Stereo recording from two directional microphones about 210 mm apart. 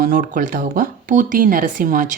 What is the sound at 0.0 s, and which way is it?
Speech, 40° right (ahead or behind).